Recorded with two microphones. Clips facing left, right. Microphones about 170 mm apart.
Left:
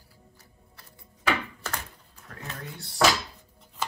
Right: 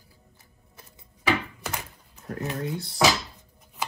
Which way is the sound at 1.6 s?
15° right (ahead or behind).